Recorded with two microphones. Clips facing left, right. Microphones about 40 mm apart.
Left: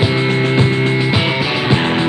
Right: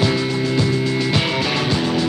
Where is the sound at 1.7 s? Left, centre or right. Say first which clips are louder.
Left 4 dB; left.